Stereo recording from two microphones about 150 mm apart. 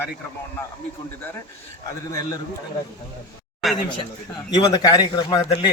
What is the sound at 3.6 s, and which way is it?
Speech, centre (ahead or behind).